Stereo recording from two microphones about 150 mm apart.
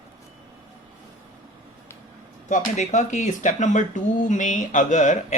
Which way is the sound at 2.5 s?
55° left (ahead or behind).